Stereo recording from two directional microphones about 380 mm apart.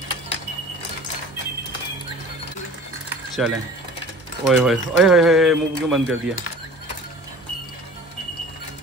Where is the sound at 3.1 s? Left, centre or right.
Centre.